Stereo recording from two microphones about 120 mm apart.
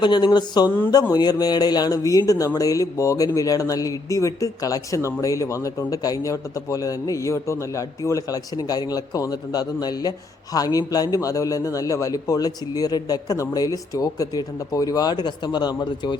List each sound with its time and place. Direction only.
0.0 s speech: 40° left (ahead or behind)